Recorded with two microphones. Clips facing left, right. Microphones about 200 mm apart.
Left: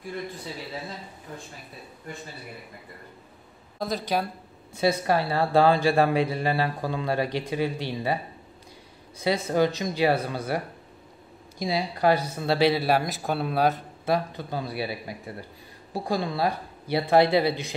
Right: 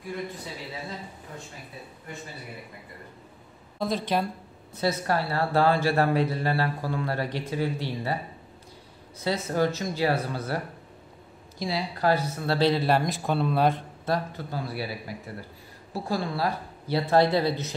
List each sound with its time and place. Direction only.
3.8 s a woman's voice: centre (ahead or behind)
4.7 s speech: 15° left (ahead or behind)
9.2 s speech: 15° left (ahead or behind)
11.6 s speech: 15° left (ahead or behind)